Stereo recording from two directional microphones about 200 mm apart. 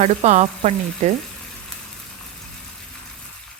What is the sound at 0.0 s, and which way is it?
A woman's voice, 35° right (ahead or behind).